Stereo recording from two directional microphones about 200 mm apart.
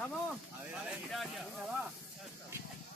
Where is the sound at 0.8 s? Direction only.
Centre (ahead or behind).